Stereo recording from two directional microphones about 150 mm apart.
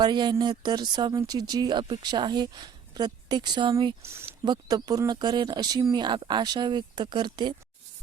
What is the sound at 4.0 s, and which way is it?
Speech, 15° right (ahead or behind).